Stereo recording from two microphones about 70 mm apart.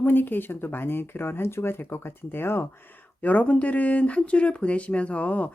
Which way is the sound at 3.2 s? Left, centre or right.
Left.